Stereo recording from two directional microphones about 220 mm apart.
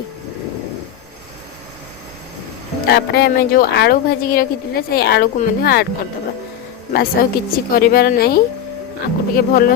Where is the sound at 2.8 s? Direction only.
45° left (ahead or behind).